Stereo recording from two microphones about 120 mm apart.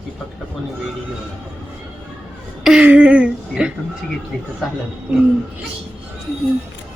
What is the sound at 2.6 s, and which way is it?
A woman's voice, 10° right (ahead or behind).